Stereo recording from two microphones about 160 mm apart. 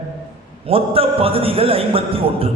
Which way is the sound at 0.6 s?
35° right (ahead or behind).